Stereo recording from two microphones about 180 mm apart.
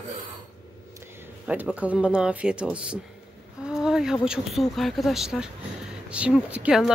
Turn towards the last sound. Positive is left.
turn(degrees=-5)  # may be behind; listen again after turning